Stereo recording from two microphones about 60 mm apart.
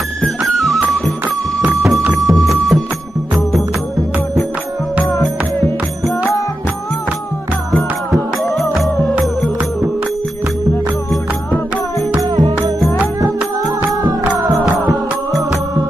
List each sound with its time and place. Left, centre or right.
0.2 s music: centre
2.1 s music: centre
8.1 s music: centre
12.2 s music: right